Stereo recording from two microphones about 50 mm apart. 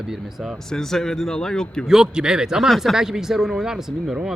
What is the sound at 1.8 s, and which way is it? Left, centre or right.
Speech, centre.